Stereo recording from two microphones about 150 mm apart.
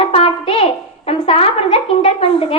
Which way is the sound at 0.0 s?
40° left (ahead or behind).